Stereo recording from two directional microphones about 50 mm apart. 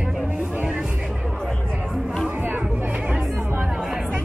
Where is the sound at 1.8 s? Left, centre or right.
Centre.